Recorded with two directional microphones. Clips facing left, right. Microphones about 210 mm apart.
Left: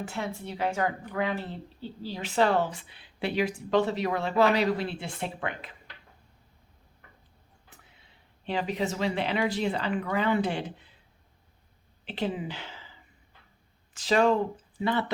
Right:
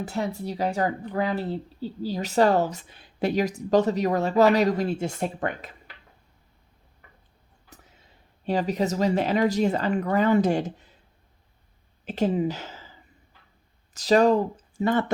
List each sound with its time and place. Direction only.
0.0 s a woman's voice: 40° right (ahead or behind)
8.4 s speech: 40° right (ahead or behind)
12.0 s speech: 45° right (ahead or behind)
13.9 s speech: 40° right (ahead or behind)